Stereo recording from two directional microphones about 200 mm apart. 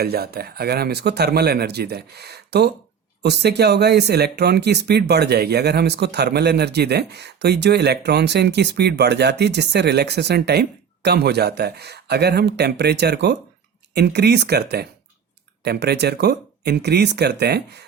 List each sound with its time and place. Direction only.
0.0 s speech: 50° right (ahead or behind)